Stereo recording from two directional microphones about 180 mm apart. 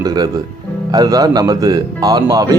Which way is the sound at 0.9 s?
20° right (ahead or behind).